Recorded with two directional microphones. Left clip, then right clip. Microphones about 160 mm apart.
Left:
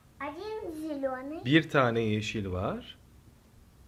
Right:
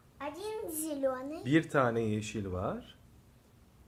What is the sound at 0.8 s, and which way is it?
Speech, 45° right (ahead or behind).